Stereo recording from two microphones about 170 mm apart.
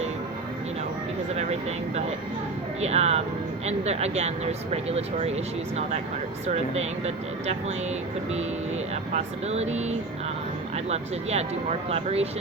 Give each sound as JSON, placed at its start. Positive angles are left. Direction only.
{"t": 2.8, "sound": "speech", "side_deg": -40}
{"t": 6.5, "sound": "speech", "side_deg": -40}
{"t": 9.1, "sound": "speech", "side_deg": -40}
{"t": 10.8, "sound": "speech", "side_deg": -40}